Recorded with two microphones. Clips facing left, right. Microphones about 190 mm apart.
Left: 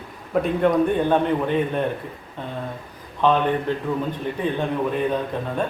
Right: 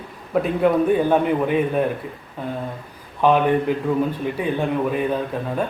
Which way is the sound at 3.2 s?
10° right (ahead or behind).